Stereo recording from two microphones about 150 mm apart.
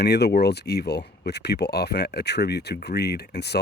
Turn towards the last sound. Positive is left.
turn(degrees=90)